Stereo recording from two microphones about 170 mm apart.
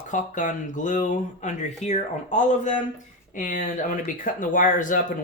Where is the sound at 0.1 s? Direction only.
50° left (ahead or behind).